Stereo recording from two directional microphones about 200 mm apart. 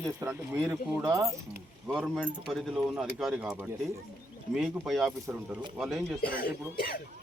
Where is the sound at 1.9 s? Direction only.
Centre (ahead or behind).